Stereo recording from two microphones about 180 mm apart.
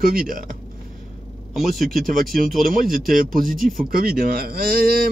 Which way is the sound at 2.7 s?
50° right (ahead or behind).